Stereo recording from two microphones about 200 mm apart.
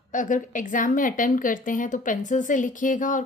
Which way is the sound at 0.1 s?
40° left (ahead or behind).